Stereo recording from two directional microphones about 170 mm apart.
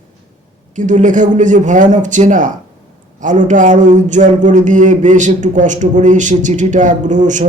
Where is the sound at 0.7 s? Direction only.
45° right (ahead or behind).